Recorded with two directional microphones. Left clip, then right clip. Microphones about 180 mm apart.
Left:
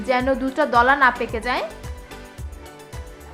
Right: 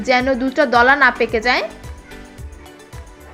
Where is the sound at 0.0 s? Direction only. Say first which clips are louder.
Right 4 dB; 10° right (ahead or behind).